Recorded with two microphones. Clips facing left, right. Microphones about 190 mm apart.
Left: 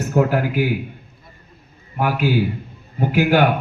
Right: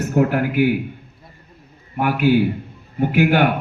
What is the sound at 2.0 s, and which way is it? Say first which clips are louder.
A man's voice: right 3 dB; 55° right (ahead or behind).